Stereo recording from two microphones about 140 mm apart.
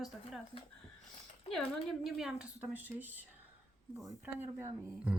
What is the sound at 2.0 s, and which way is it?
A woman's voice, 5° right (ahead or behind).